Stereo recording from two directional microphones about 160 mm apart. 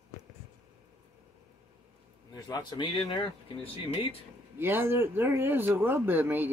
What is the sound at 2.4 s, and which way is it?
Speech, 25° left (ahead or behind).